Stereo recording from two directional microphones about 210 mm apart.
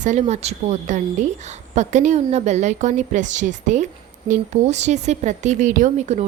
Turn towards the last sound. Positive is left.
turn(degrees=-35)  # may be behind; listen again after turning